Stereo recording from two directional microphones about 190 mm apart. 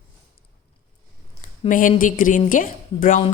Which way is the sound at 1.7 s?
45° left (ahead or behind).